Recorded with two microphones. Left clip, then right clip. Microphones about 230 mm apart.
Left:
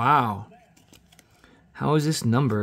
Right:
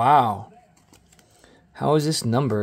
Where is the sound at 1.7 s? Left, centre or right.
Centre.